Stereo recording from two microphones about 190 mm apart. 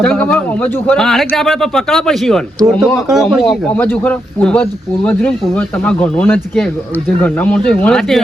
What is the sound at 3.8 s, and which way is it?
Speech, 10° left (ahead or behind).